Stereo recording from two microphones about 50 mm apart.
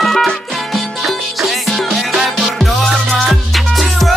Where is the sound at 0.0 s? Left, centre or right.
Centre.